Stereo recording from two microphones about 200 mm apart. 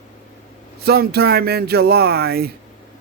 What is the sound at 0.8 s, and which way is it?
Speech, 50° right (ahead or behind).